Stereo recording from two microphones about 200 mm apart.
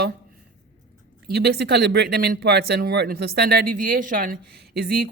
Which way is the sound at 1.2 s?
50° right (ahead or behind).